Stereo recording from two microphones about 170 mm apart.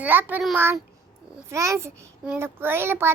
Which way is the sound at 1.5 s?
15° right (ahead or behind).